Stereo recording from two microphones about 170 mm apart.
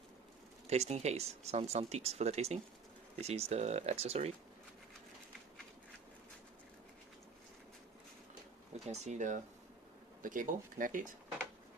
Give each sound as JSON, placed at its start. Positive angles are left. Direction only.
{"t": 0.7, "sound": "speech", "side_deg": -40}
{"t": 8.9, "sound": "speech", "side_deg": -45}